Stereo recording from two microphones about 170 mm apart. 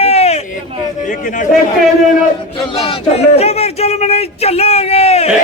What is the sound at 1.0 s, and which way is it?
Speech, 50° left (ahead or behind).